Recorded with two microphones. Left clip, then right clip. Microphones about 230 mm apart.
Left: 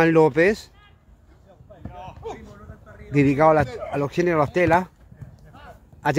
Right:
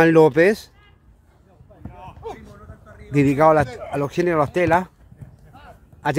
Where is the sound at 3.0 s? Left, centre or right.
Centre.